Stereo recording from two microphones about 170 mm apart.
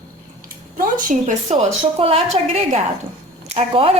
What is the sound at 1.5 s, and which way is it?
A woman's voice, 40° right (ahead or behind).